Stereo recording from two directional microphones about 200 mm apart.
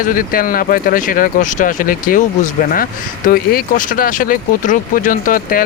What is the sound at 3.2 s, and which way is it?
Speech, 45° left (ahead or behind).